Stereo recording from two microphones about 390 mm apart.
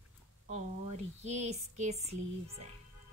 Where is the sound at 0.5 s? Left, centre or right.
Centre.